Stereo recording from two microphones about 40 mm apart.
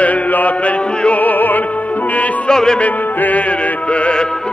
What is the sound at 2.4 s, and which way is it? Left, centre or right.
Music, centre.